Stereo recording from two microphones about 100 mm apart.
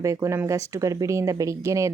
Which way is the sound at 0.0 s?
30° right (ahead or behind).